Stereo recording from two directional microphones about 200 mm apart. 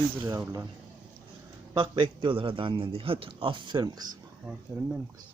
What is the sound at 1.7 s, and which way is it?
A man's voice, 25° right (ahead or behind).